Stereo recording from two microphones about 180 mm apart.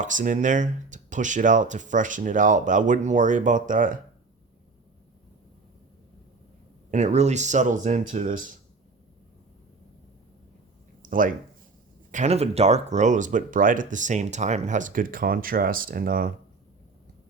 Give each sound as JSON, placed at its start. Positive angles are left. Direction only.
{"t": 0.0, "sound": "speech", "side_deg": -45}
{"t": 6.9, "sound": "speech", "side_deg": -40}
{"t": 11.0, "sound": "a sound", "side_deg": -50}
{"t": 12.1, "sound": "speech", "side_deg": -40}